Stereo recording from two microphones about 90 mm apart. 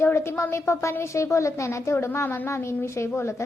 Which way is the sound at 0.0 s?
30° left (ahead or behind).